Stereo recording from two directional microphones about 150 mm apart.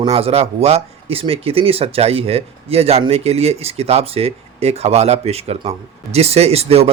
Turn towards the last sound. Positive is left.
turn(degrees=-40)  # may be behind; listen again after turning